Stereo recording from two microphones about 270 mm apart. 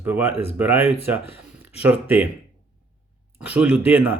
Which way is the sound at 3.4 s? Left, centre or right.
Centre.